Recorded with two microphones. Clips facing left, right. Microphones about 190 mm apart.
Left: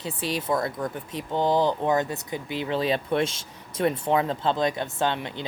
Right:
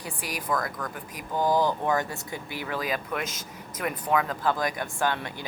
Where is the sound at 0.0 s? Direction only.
25° left (ahead or behind).